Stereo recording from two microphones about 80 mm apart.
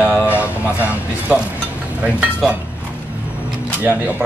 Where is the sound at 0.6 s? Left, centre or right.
Centre.